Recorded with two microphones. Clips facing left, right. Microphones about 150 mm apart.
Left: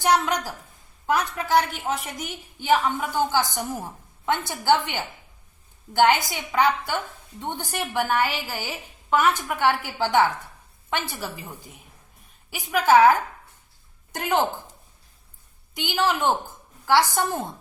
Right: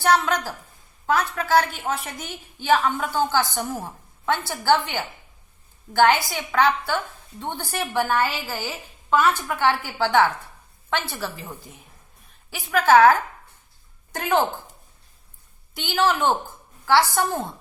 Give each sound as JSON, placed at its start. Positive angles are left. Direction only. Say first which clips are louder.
{"t": 0.0, "sound": "a woman's voice", "louder": "right 1 dB", "side_deg": 15}
{"t": 12.5, "sound": "a woman's voice", "louder": "right 1 dB", "side_deg": 15}
{"t": 15.7, "sound": "a woman's voice", "louder": "right 2 dB", "side_deg": 15}